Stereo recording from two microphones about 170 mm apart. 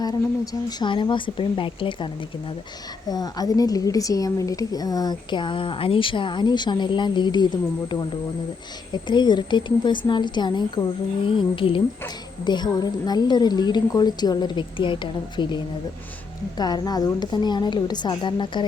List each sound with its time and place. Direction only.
0.8 s a woman's voice: 25° left (ahead or behind)
3.1 s a woman's voice: 20° left (ahead or behind)
9.0 s a woman's voice: 25° left (ahead or behind)